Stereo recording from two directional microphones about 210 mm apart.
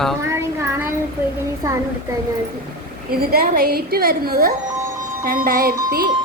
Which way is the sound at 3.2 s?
45° right (ahead or behind).